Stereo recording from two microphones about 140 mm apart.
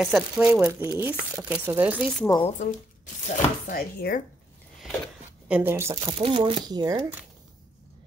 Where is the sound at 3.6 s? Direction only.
85° left.